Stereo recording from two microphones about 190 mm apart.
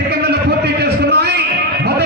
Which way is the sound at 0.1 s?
60° right (ahead or behind).